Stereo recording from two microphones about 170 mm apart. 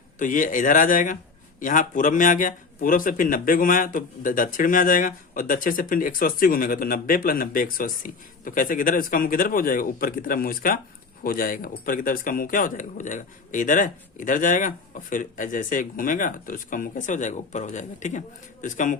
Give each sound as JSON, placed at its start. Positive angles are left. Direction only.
{"t": 0.2, "sound": "speech", "side_deg": 50}